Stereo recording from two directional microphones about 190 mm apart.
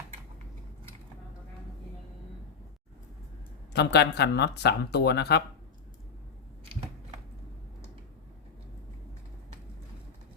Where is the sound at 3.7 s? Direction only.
65° left (ahead or behind).